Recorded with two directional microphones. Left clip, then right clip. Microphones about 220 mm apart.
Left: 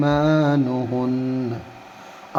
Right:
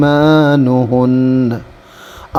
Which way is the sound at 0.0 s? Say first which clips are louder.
Right 9 dB; 40° right (ahead or behind).